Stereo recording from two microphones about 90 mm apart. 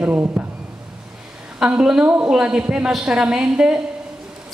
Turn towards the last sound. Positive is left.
turn(degrees=-10)  # may be behind; listen again after turning